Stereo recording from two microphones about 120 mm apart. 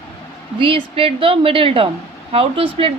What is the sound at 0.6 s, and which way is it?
Speech, 50° right (ahead or behind).